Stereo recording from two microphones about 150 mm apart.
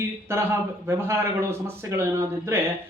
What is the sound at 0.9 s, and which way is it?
A man's voice, 15° right (ahead or behind).